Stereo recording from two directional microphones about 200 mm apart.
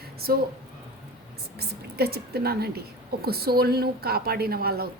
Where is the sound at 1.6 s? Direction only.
50° right (ahead or behind).